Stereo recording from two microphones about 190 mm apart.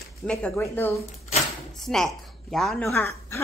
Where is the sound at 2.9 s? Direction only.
15° left (ahead or behind).